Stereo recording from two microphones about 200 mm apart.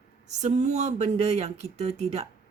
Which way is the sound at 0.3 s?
35° right (ahead or behind).